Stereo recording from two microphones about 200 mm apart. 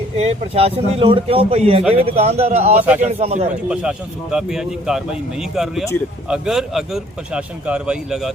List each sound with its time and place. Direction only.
0.2 s a man's voice: 30° right (ahead or behind)
2.7 s a man's voice: 5° right (ahead or behind)
3.0 s a man's voice: 30° right (ahead or behind)
3.7 s speech: 5° right (ahead or behind)